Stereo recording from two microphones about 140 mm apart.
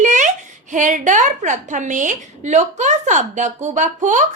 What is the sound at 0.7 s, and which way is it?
A woman's voice, 65° right (ahead or behind).